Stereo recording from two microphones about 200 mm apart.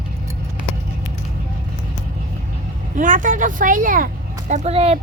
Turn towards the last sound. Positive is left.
turn(degrees=-30)  # may be behind; listen again after turning